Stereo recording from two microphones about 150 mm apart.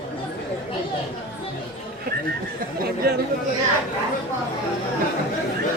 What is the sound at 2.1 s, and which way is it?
Chatter, 90° right.